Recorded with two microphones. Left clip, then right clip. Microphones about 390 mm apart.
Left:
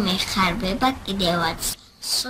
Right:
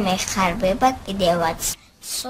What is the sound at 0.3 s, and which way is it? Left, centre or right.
A woman's voice, centre.